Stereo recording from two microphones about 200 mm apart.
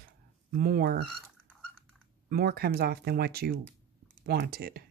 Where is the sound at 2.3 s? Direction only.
50° right (ahead or behind).